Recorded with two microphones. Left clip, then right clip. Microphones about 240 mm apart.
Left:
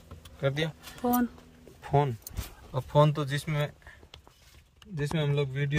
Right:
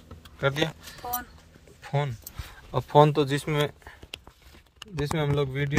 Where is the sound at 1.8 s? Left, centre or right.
Centre.